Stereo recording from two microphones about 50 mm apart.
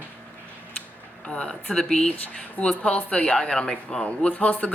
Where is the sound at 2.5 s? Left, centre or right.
Left.